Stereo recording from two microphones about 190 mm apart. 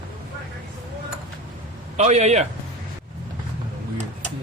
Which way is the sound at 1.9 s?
35° right (ahead or behind).